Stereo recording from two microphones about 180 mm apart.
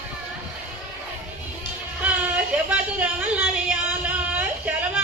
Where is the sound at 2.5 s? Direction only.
5° right (ahead or behind).